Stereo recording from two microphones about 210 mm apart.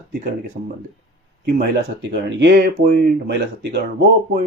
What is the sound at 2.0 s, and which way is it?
Speech, 55° right (ahead or behind).